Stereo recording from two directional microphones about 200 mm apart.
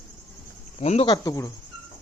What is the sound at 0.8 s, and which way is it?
Speech, 30° left (ahead or behind).